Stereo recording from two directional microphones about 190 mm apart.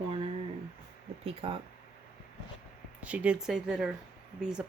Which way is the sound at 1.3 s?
30° right (ahead or behind).